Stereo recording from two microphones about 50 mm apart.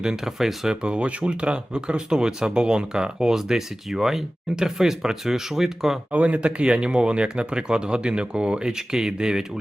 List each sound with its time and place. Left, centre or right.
0.0 s speech: centre
0.8 s speech: right
6.1 s speech: right